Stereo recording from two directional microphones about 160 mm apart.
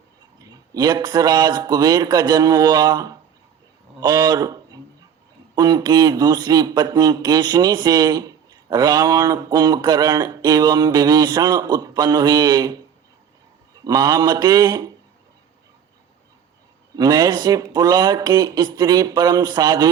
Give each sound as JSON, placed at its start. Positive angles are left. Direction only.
{"t": 0.3, "sound": "a man's voice", "side_deg": -20}
{"t": 13.8, "sound": "speech", "side_deg": -25}
{"t": 16.9, "sound": "speech", "side_deg": -25}